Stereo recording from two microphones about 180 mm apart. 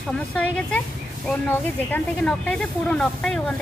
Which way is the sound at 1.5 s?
10° left (ahead or behind).